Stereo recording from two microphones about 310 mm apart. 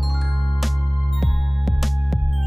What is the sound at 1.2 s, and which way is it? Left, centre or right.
Music, centre.